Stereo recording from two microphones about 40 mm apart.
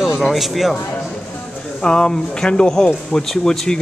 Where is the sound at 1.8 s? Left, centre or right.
Left.